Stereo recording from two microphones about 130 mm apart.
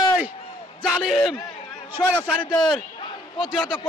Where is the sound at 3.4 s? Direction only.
5° right (ahead or behind).